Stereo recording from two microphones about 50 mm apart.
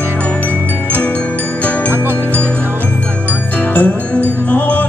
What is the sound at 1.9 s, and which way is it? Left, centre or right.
Music, right.